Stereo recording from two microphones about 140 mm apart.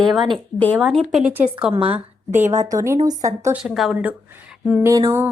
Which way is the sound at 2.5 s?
20° right (ahead or behind).